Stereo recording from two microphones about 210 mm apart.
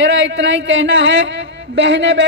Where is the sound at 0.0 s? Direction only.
60° right (ahead or behind).